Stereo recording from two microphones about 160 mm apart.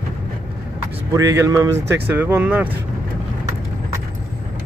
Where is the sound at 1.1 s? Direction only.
20° right (ahead or behind).